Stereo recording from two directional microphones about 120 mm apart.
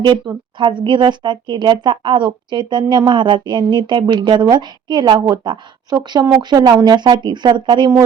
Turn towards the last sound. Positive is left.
turn(degrees=-40)  # may be behind; listen again after turning